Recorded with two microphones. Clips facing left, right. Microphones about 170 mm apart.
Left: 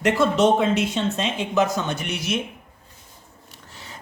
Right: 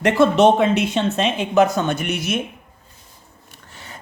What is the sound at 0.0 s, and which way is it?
Speech, 60° right (ahead or behind).